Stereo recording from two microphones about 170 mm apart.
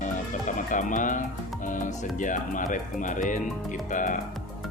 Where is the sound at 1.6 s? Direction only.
50° left (ahead or behind).